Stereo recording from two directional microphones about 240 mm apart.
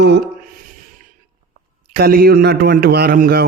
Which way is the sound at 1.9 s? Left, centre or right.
Right.